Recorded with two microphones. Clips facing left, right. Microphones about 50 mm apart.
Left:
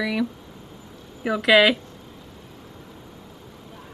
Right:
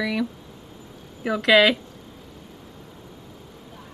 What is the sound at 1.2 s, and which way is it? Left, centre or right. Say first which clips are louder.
Speech: even; centre.